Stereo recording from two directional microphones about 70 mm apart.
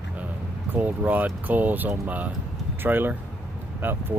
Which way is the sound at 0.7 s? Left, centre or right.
Right.